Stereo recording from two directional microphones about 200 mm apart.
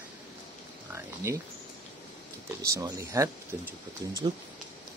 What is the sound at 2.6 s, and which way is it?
Speech, 15° right (ahead or behind).